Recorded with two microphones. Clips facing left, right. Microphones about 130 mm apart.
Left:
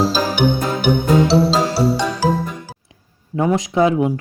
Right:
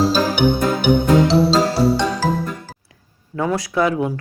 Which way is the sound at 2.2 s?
15° left (ahead or behind).